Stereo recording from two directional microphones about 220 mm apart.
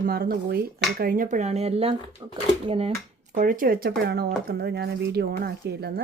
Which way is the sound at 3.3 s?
40° right (ahead or behind).